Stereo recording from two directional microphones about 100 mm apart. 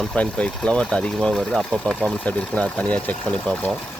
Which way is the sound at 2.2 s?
15° left (ahead or behind).